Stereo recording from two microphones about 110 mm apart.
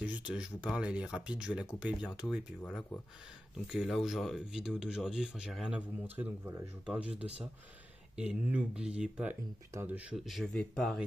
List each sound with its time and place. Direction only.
0.3 s speech: 10° right (ahead or behind)
2.6 s speech: 10° left (ahead or behind)
3.5 s speech: 5° right (ahead or behind)
6.1 s speech: 20° right (ahead or behind)
8.3 s speech: 10° right (ahead or behind)
10.1 s speech: centre (ahead or behind)